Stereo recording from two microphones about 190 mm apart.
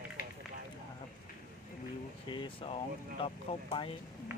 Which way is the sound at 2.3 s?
25° left (ahead or behind).